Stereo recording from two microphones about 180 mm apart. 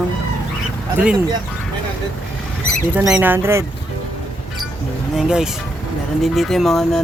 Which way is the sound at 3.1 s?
10° right (ahead or behind).